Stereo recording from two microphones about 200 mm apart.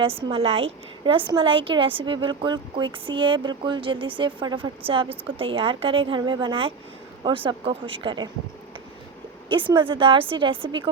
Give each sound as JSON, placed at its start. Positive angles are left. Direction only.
{"t": 0.0, "sound": "a woman's voice", "side_deg": -25}
{"t": 9.5, "sound": "a woman's voice", "side_deg": -25}